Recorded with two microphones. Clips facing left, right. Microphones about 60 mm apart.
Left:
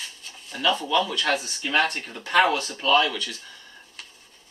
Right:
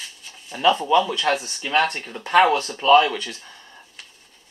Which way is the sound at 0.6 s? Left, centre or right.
Right.